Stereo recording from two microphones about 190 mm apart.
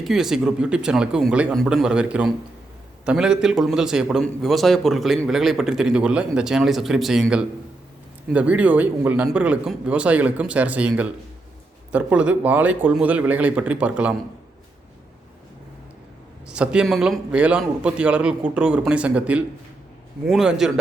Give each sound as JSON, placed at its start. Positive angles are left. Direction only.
{"t": 0.0, "sound": "a man's voice", "side_deg": 0}
{"t": 16.5, "sound": "a man's voice", "side_deg": -5}